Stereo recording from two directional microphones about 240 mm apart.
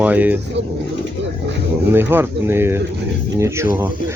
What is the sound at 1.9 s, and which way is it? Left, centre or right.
Speech, centre.